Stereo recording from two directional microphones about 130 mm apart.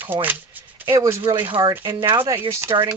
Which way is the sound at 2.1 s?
20° right (ahead or behind).